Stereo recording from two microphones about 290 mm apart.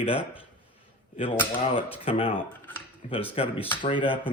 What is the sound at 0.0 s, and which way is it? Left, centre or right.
Speech, centre.